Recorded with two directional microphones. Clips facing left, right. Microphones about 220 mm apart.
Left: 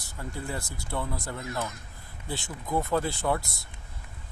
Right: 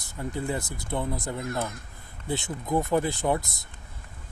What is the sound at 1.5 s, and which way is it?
Speech, 55° right (ahead or behind).